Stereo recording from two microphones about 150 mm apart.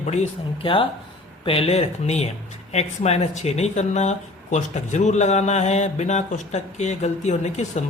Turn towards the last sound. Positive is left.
turn(degrees=50)  # may be behind; listen again after turning